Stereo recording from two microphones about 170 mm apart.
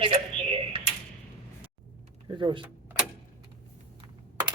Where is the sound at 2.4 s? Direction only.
30° right (ahead or behind).